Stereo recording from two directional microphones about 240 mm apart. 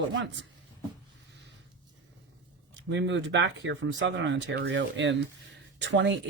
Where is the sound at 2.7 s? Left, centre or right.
Right.